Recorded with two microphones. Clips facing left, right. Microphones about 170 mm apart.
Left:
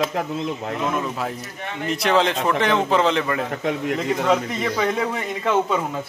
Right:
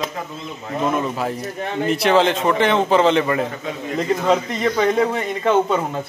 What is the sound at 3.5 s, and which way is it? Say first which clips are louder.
Speech: left 4 dB; 65° left (ahead or behind).